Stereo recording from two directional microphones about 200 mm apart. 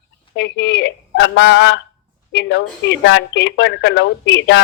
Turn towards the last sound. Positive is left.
turn(degrees=60)  # may be behind; listen again after turning